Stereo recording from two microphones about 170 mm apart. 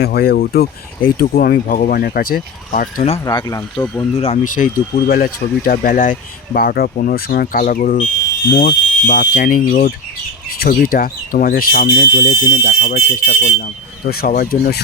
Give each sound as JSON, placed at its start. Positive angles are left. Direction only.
{"t": 0.0, "sound": "speech", "side_deg": 65}
{"t": 3.2, "sound": "speech", "side_deg": 25}
{"t": 4.5, "sound": "speech", "side_deg": 55}
{"t": 12.3, "sound": "speech", "side_deg": 20}
{"t": 12.6, "sound": "speech", "side_deg": 65}
{"t": 13.6, "sound": "speech", "side_deg": 60}